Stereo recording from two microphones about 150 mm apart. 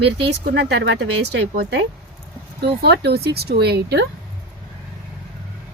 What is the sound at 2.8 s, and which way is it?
A woman's voice, 90° right.